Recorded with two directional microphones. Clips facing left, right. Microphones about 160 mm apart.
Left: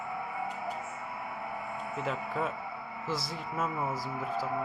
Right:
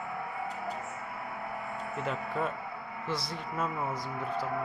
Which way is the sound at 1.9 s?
Centre (ahead or behind).